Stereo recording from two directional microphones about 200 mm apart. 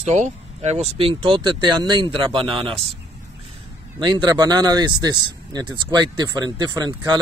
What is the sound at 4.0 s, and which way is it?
A man's voice, 20° right (ahead or behind).